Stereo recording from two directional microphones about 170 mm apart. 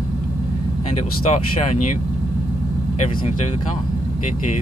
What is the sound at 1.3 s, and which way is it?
Speech, 40° left (ahead or behind).